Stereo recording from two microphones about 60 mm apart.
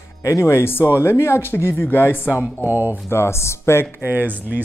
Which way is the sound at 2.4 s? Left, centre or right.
Right.